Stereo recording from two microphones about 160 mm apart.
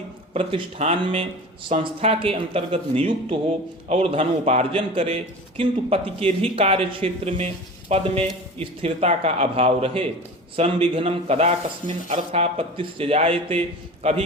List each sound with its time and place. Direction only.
0.3 s a man's voice: 35° right (ahead or behind)